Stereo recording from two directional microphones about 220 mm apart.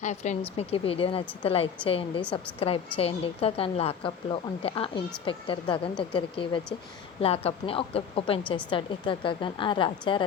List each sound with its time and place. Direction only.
0.0 s a woman's voice: 30° left (ahead or behind)